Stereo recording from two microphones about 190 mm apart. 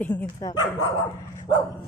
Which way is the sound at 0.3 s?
20° left (ahead or behind).